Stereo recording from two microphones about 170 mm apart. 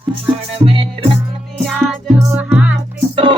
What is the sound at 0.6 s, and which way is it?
Music, 30° right (ahead or behind).